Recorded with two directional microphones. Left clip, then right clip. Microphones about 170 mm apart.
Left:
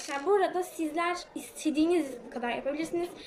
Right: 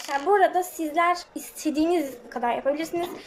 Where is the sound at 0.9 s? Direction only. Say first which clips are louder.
Right 11 dB; 40° right (ahead or behind).